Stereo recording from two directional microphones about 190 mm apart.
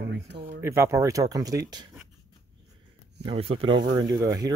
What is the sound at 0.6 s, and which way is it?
Speech, 15° right (ahead or behind).